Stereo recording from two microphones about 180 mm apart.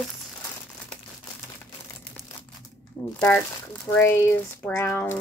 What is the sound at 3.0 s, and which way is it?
Speech, 15° left (ahead or behind).